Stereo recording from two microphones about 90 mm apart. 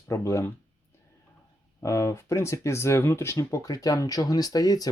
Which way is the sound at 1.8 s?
35° left (ahead or behind).